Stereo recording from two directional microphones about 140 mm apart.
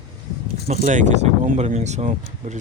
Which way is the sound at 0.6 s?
60° right (ahead or behind).